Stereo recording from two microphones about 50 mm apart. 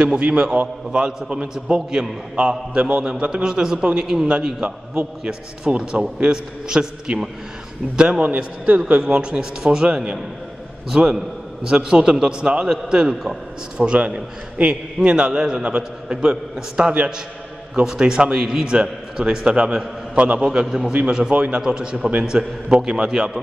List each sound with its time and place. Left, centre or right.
0.0 s a man's voice: right
9.0 s a man's voice: centre
13.1 s a man's voice: centre
13.7 s a man's voice: right
20.5 s a man's voice: centre
21.1 s a man's voice: right